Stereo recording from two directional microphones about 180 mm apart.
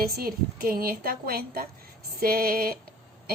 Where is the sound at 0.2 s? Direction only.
55° right (ahead or behind).